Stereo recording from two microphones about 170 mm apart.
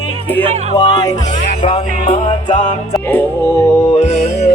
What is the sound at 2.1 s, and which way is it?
Music, 45° left (ahead or behind).